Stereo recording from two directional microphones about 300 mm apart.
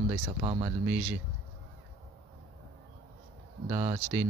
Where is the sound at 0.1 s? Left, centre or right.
Centre.